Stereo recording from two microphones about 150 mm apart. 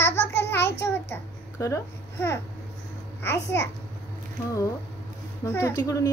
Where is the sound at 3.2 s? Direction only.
15° left (ahead or behind).